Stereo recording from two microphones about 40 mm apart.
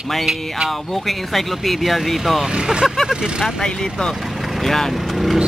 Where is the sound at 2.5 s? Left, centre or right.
Centre.